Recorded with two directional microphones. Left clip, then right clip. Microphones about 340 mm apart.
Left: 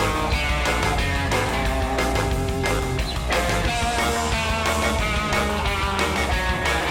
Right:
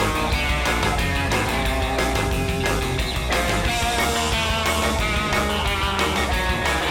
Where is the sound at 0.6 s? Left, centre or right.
Centre.